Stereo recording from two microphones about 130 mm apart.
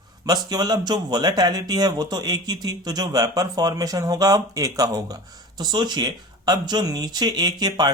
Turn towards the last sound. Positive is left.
turn(degrees=-30)  # may be behind; listen again after turning